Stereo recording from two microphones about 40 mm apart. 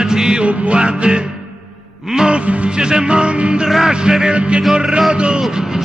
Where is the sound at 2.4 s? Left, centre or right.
Right.